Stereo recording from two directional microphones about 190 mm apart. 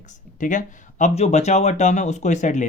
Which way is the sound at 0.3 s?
40° left (ahead or behind).